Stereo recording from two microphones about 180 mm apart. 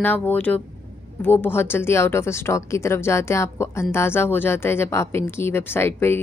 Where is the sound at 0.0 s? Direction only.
10° left (ahead or behind).